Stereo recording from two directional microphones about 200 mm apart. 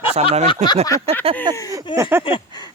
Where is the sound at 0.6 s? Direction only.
35° right (ahead or behind).